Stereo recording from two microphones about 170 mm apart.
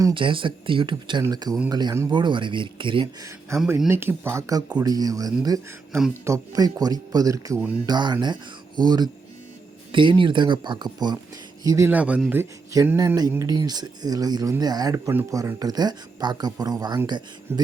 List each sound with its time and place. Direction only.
0.0 s speech: 30° right (ahead or behind)
3.5 s speech: 15° right (ahead or behind)
11.9 s speech: 10° right (ahead or behind)